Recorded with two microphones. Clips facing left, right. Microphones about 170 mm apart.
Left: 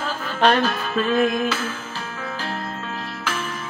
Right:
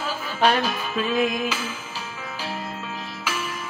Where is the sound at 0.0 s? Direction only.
10° right (ahead or behind).